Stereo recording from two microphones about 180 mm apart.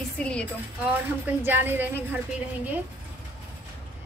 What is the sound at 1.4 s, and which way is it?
Speech, 10° right (ahead or behind).